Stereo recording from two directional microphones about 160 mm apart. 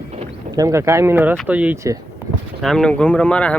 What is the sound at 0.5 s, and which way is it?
Speech, 20° right (ahead or behind).